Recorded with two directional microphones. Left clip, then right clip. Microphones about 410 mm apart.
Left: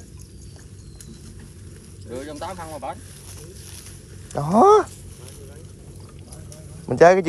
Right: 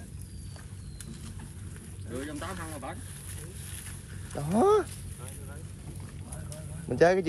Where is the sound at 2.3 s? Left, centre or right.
Centre.